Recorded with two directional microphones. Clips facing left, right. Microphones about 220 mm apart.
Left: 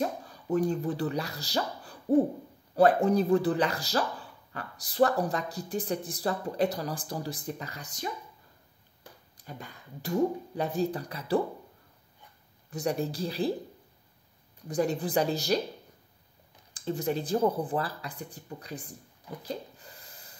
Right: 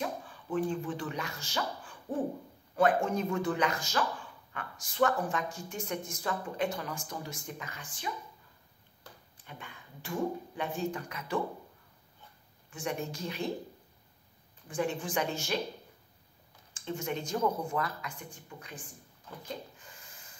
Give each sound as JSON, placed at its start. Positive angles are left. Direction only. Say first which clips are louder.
{"t": 0.0, "sound": "speech", "louder": "left 5 dB", "side_deg": 40}
{"t": 9.4, "sound": "speech", "louder": "left 5 dB", "side_deg": 40}
{"t": 12.6, "sound": "speech", "louder": "left 6 dB", "side_deg": 40}
{"t": 14.7, "sound": "speech", "louder": "left 5 dB", "side_deg": 40}
{"t": 16.7, "sound": "speech", "louder": "left 5 dB", "side_deg": 35}
{"t": 19.4, "sound": "a sound", "louder": "left 4 dB", "side_deg": 35}